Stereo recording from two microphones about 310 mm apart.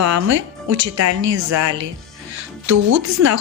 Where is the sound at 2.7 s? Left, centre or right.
Right.